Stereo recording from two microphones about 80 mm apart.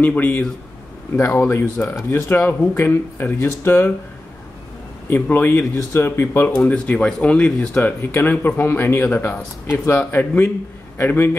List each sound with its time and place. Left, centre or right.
0.0 s speech: left
1.1 s speech: left
2.4 s speech: left
5.1 s speech: left
6.5 s speech: centre
7.8 s speech: left